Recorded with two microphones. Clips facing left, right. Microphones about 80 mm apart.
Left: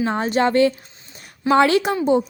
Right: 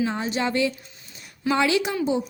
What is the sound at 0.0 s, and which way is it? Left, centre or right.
A woman's voice, left.